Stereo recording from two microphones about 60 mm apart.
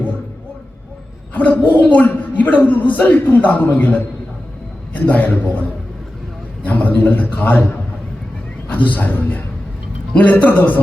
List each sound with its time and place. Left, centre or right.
1.3 s a man's voice: left
5.0 s a man's voice: left
6.7 s a man's voice: left